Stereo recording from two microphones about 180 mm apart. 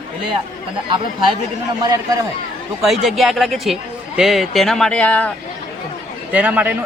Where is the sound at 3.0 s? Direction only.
Centre (ahead or behind).